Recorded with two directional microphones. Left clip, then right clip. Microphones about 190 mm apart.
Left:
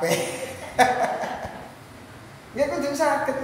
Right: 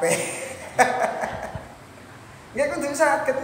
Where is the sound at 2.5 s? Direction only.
10° right (ahead or behind).